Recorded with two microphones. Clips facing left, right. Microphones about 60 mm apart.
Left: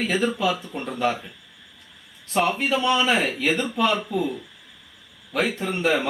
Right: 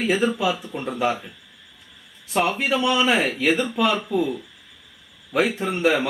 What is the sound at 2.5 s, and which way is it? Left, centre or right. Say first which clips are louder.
Speech: even; centre.